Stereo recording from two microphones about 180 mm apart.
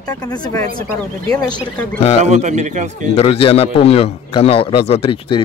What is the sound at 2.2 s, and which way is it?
Speech, 40° right (ahead or behind).